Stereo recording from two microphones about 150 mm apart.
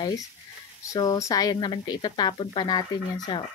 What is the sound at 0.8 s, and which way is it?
Speech, 25° left (ahead or behind).